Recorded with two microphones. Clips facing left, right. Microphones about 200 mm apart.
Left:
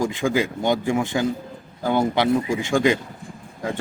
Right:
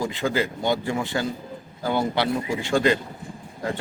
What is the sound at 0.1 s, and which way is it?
Speech, 15° left (ahead or behind).